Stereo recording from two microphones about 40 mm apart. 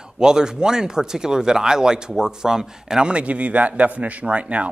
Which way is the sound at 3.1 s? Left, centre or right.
Right.